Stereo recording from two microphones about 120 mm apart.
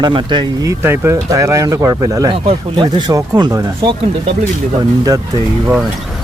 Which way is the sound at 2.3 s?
45° right (ahead or behind).